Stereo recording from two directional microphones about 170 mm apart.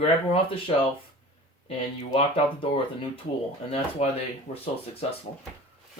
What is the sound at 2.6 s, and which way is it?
Speech, 30° left (ahead or behind).